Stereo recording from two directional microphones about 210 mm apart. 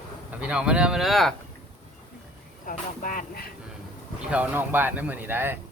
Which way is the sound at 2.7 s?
40° left (ahead or behind).